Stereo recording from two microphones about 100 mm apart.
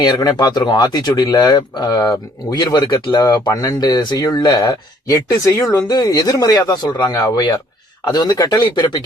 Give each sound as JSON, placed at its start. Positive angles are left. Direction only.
{"t": 0.0, "sound": "speech", "side_deg": 40}